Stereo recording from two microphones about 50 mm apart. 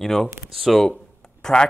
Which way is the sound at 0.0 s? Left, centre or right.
Centre.